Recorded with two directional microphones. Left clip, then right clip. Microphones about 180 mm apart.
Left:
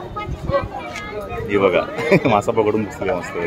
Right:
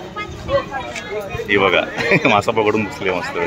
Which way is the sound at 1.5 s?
Centre (ahead or behind).